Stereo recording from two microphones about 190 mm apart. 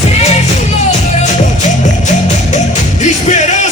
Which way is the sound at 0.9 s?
40° left (ahead or behind).